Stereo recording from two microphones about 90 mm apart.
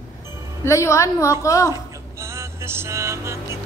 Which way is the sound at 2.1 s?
30° right (ahead or behind).